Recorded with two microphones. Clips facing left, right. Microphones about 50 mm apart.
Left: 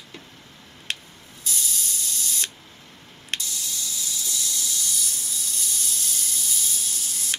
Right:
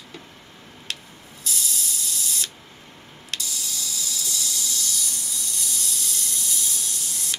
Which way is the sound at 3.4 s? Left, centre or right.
Centre.